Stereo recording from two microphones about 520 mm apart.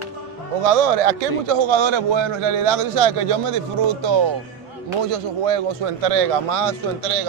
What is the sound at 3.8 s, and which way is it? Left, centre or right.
Speech, right.